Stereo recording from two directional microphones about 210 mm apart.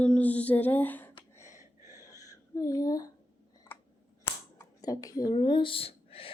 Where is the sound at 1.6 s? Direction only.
15° right (ahead or behind).